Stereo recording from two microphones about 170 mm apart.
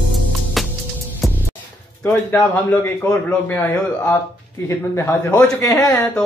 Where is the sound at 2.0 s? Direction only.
10° left (ahead or behind).